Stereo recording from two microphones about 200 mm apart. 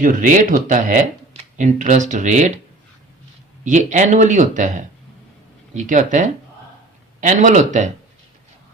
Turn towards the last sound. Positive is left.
turn(degrees=-35)  # may be behind; listen again after turning